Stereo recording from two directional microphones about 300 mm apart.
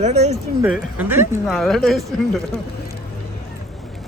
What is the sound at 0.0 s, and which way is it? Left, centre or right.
Speech, right.